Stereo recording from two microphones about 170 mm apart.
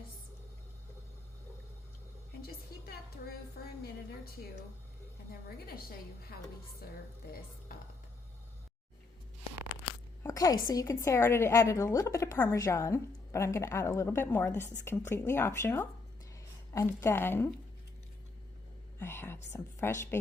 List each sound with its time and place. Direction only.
5.3 s a woman's voice: 65° left (ahead or behind)
10.2 s a woman's voice: 20° left (ahead or behind)
18.9 s a woman's voice: 15° left (ahead or behind)